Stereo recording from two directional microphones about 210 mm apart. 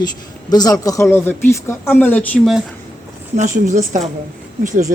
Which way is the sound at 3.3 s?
35° right (ahead or behind).